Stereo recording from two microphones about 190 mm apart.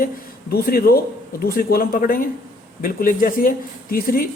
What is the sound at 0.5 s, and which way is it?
A man's voice, 50° left (ahead or behind).